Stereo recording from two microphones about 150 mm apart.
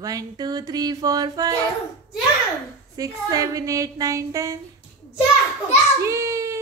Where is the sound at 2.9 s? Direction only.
25° right (ahead or behind).